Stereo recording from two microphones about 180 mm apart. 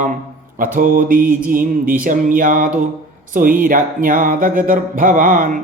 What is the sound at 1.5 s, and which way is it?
Music, 50° right (ahead or behind).